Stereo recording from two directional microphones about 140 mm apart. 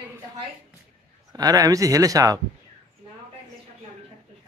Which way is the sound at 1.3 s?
25° right (ahead or behind).